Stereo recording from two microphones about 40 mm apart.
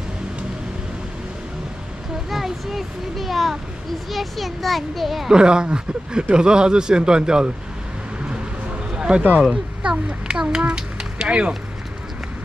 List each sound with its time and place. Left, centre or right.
2.2 s a child's voice: centre
5.3 s speech: right
8.9 s a sound: right
9.4 s speech: right